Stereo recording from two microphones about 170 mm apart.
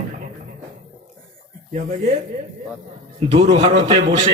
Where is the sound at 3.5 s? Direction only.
25° right (ahead or behind).